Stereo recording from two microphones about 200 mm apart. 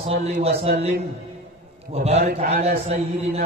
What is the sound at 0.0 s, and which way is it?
A man's voice, 30° right (ahead or behind).